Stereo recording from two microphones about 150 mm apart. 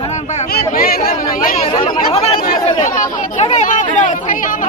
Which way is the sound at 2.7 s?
50° left (ahead or behind).